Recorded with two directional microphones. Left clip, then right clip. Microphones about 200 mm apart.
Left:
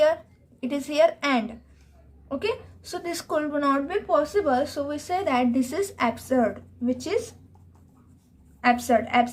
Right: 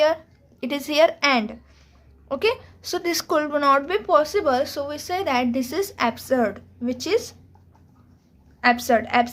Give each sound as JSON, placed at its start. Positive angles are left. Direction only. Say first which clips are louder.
{"t": 0.6, "sound": "speech", "louder": "right 3 dB", "side_deg": -25}
{"t": 8.6, "sound": "speech", "louder": "right 2 dB", "side_deg": -20}